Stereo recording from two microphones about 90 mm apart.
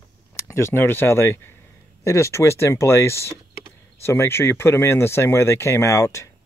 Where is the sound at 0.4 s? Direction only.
30° left (ahead or behind).